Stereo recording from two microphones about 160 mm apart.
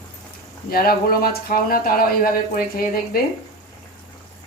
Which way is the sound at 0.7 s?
70° left (ahead or behind).